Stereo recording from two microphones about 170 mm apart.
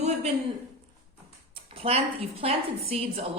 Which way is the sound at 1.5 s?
35° right (ahead or behind).